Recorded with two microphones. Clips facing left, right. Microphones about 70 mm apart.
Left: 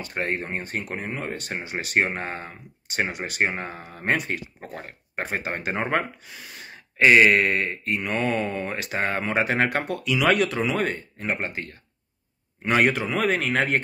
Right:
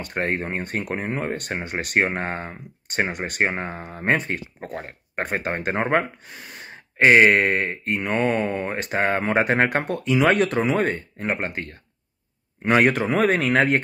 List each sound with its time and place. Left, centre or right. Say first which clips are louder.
0.0 s speech: right 3 dB; right
3.5 s speech: right 3 dB; right
4.8 s speech: right 1 dB; right
12.6 s speech: right 3 dB; right